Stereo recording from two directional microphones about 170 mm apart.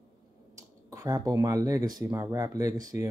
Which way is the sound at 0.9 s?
20° right (ahead or behind).